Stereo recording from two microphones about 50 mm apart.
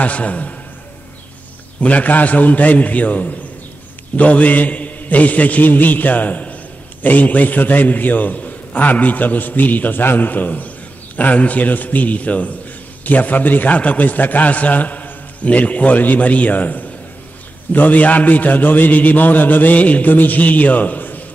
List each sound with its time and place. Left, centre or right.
0.0 s a man's voice: left
1.8 s a man's voice: left